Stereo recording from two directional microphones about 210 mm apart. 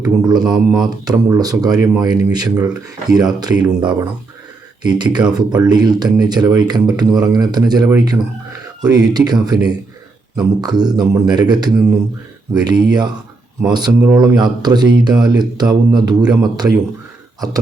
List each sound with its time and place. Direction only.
0.0 s speech: 20° right (ahead or behind)